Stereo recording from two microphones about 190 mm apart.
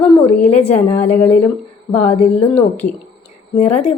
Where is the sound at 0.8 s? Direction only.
10° left (ahead or behind).